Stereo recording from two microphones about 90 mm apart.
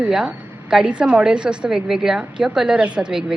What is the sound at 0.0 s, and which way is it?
A woman's voice, 5° right (ahead or behind).